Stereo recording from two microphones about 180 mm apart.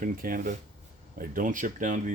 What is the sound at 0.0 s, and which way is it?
Speech, 50° right (ahead or behind).